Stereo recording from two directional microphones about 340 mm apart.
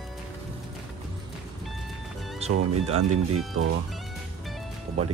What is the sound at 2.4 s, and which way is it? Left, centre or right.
Music, centre.